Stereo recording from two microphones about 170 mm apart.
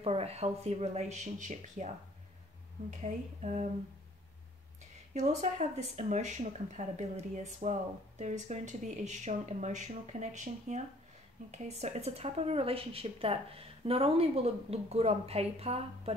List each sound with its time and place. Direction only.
0.0 s speech: 35° right (ahead or behind)
2.9 s speech: 45° right (ahead or behind)
5.1 s speech: 40° right (ahead or behind)